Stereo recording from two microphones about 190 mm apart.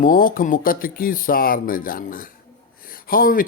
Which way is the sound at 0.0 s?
45° left (ahead or behind).